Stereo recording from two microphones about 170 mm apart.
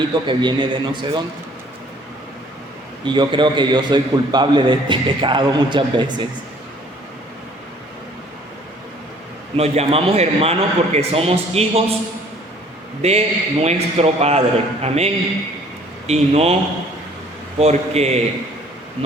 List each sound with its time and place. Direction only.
0.1 s a man's voice: 25° right (ahead or behind)
3.0 s a man's voice: 25° right (ahead or behind)
9.6 s a man's voice: 35° right (ahead or behind)
13.0 s a man's voice: 40° right (ahead or behind)
17.6 s a man's voice: 40° right (ahead or behind)